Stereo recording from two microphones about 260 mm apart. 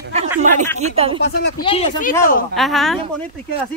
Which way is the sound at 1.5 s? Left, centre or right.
Left.